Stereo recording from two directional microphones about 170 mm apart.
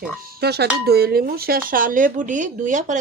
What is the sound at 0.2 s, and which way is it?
Speech, 65° right (ahead or behind).